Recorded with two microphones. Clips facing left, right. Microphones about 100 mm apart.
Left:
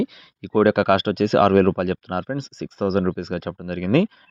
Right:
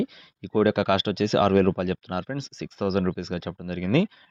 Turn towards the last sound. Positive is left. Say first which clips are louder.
# left 4 dB
turn(degrees=50)  # may be behind; listen again after turning